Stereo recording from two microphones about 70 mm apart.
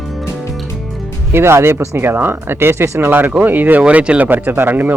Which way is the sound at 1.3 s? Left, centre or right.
Right.